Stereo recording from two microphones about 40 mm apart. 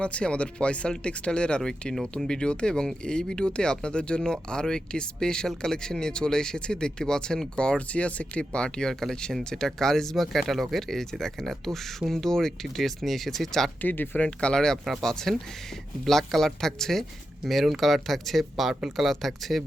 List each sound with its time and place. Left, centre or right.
0.0 s speech: left
7.8 s speech: left
8.9 s speech: centre
13.8 s speech: left
14.2 s speech: left
14.5 s speech: centre
17.4 s speech: centre